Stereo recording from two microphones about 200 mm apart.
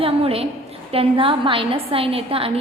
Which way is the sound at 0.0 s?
30° right (ahead or behind).